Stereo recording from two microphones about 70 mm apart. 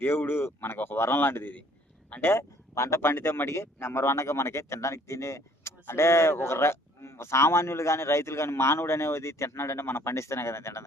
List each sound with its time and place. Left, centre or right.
0.0 s speech: left
2.2 s speech: left
3.0 s speech: left